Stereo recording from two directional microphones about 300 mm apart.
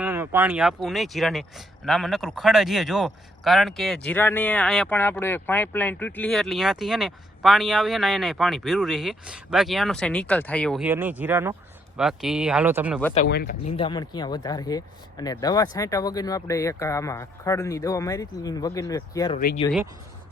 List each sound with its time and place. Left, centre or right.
0.0 s speech: centre
13.1 s speech: left
13.7 s speech: centre